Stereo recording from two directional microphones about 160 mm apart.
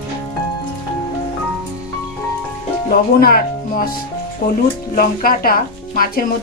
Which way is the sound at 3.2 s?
65° left (ahead or behind).